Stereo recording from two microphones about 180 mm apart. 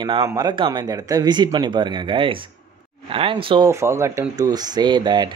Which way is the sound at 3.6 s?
15° right (ahead or behind).